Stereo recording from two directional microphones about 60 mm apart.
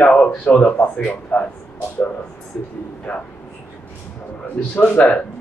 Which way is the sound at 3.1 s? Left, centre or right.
Left.